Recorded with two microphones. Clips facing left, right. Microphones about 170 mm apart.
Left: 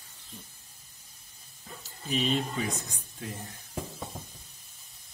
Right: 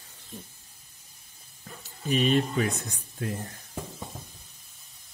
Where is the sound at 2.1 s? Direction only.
60° right (ahead or behind).